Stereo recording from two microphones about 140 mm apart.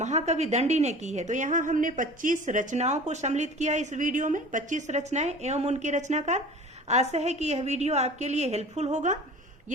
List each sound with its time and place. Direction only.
0.0 s a woman's voice: 55° right (ahead or behind)